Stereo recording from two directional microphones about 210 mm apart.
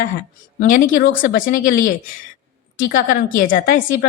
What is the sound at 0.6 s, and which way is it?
A woman's voice, 40° left (ahead or behind).